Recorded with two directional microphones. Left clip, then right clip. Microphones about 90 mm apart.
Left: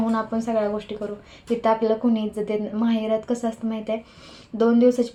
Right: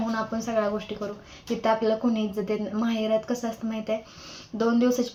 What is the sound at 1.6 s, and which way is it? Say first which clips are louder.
Speech: left 3 dB; 15° left (ahead or behind).